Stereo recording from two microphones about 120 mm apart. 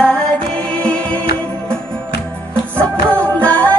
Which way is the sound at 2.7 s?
10° left (ahead or behind).